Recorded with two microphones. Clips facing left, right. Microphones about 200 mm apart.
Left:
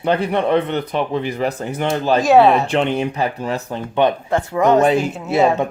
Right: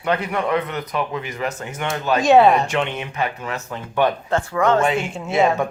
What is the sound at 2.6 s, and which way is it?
Speech, 35° left (ahead or behind).